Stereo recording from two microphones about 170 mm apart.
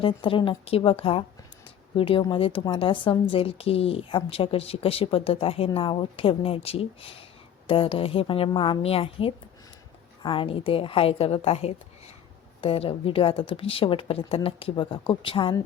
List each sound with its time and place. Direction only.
0.0 s a woman's voice: 30° left (ahead or behind)